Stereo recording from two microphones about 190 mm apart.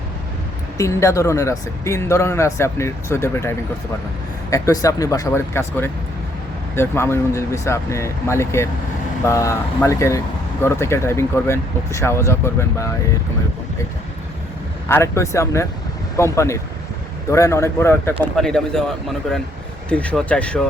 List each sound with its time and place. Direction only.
0.8 s speech: 15° left (ahead or behind)
4.5 s speech: 15° left (ahead or behind)
14.8 s speech: 15° left (ahead or behind)
18.2 s speech: 5° left (ahead or behind)